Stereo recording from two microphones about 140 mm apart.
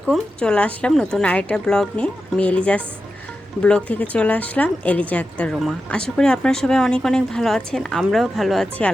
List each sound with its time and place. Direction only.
0.1 s speech: 5° left (ahead or behind)